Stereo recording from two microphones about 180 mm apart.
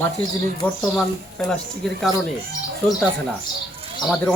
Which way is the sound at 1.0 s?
5° left (ahead or behind).